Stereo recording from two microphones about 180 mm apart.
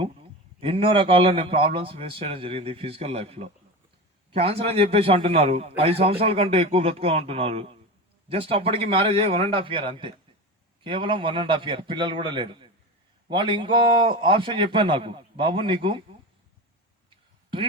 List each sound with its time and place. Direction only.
0.6 s a man's voice: 30° right (ahead or behind)